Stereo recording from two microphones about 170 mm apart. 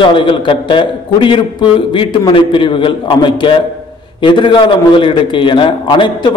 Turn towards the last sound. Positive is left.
turn(degrees=30)  # may be behind; listen again after turning